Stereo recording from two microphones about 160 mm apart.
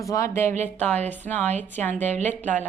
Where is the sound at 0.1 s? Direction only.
15° left (ahead or behind).